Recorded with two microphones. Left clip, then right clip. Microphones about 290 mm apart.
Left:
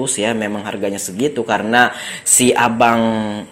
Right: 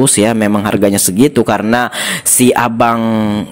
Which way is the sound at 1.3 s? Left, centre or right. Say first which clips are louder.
Right 2 dB; right.